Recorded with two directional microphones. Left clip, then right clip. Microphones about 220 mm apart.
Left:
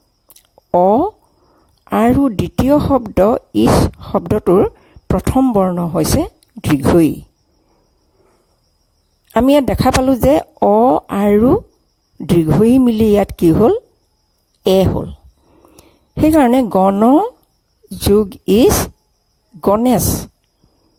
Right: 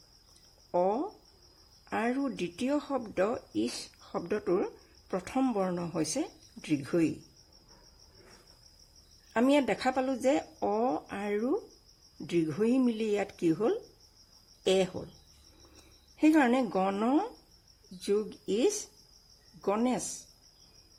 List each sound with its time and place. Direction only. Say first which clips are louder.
0.7 s speech: left 18 dB; 40° left (ahead or behind)
9.3 s speech: left 15 dB; 45° left (ahead or behind)
16.1 s speech: left 14 dB; 45° left (ahead or behind)